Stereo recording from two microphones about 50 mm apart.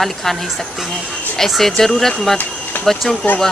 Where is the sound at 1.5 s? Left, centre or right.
Centre.